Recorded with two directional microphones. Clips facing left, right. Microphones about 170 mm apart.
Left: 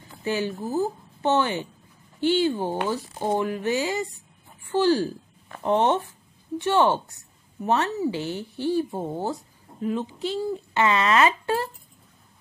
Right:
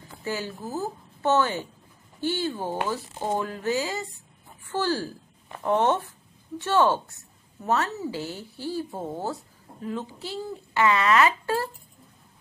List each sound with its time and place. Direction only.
0.2 s speech: 20° left (ahead or behind)